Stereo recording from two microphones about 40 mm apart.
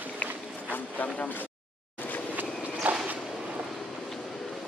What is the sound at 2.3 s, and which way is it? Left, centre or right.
Walk, right.